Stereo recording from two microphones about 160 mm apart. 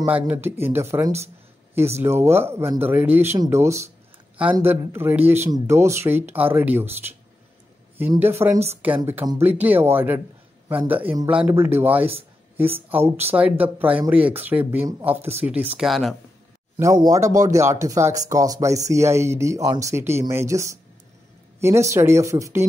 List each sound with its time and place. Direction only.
0.0 s speech: 10° right (ahead or behind)
8.2 s speech: 15° right (ahead or behind)
15.9 s speech: centre (ahead or behind)
16.7 s speech: 20° right (ahead or behind)